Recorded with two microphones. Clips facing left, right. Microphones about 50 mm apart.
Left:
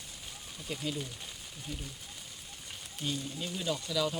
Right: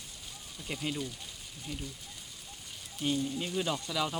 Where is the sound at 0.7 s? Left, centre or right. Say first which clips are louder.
Right 1 dB; centre.